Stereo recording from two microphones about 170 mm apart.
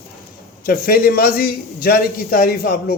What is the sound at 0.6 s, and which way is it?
A man's voice, 60° left (ahead or behind).